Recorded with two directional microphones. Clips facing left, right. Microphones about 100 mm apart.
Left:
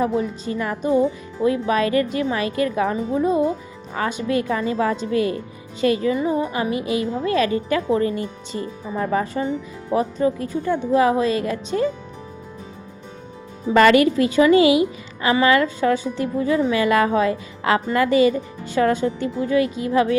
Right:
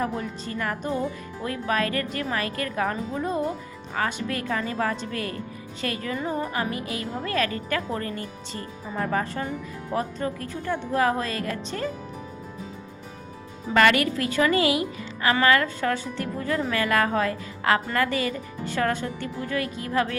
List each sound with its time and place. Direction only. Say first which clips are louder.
0.0 s speech: left 7 dB; 20° left (ahead or behind)
13.7 s speech: left 6 dB; 25° left (ahead or behind)